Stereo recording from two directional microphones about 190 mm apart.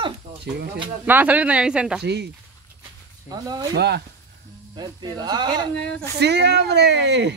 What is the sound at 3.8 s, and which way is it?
Speech, 60° right (ahead or behind).